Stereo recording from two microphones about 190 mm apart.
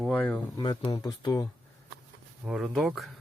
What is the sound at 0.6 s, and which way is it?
Speech, 25° left (ahead or behind).